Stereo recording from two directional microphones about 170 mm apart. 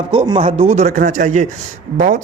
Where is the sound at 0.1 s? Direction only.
30° right (ahead or behind).